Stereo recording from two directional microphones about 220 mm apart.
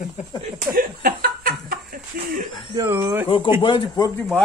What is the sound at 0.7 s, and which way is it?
Speech, 40° right (ahead or behind).